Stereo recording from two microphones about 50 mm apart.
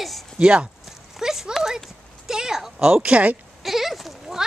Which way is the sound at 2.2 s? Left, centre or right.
Centre.